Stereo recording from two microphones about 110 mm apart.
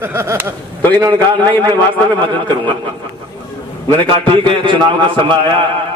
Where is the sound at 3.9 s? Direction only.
50° right (ahead or behind).